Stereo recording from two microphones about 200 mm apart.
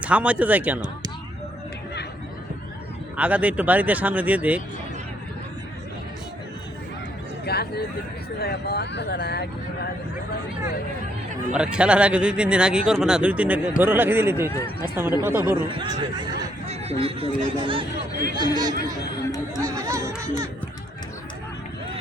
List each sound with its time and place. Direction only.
0.0 s speech: 5° right (ahead or behind)
3.2 s speech: 5° right (ahead or behind)
7.4 s speech: 55° left (ahead or behind)
11.5 s speech: 5° right (ahead or behind)
15.7 s speech: 25° right (ahead or behind)